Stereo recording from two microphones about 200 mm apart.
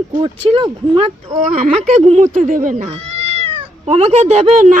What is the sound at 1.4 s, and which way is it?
Speech, 40° right (ahead or behind).